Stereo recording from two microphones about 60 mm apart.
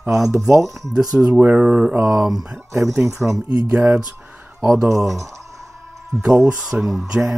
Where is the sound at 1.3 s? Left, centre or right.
Right.